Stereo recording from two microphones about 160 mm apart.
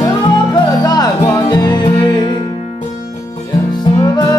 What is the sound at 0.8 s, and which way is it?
Music, 25° left (ahead or behind).